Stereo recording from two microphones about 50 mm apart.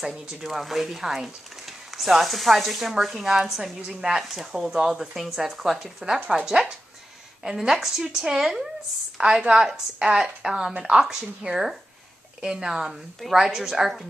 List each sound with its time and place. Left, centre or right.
0.0 s a woman's voice: centre